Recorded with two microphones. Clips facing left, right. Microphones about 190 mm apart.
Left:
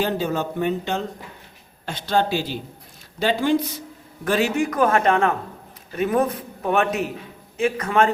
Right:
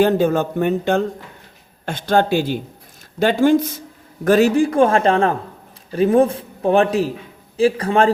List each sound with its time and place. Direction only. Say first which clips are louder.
0.0 s a man's voice: right 8 dB; 50° right (ahead or behind); by 8.1 s 30° right (ahead or behind)